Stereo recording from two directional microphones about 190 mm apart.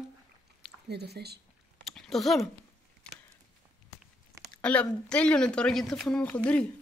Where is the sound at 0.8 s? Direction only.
60° right (ahead or behind).